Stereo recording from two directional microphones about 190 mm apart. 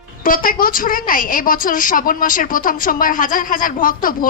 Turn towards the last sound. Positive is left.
turn(degrees=45)  # may be behind; listen again after turning